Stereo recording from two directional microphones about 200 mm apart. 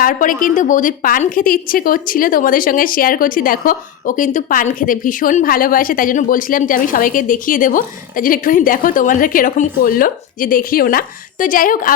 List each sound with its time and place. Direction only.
0.0 s a woman's voice: 40° left (ahead or behind)